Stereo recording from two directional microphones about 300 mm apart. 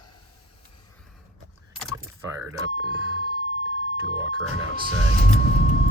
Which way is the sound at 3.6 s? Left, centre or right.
Right.